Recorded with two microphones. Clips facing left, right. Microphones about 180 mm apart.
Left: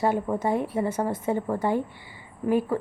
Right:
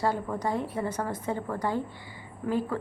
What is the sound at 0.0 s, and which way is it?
A woman's voice, 25° left (ahead or behind).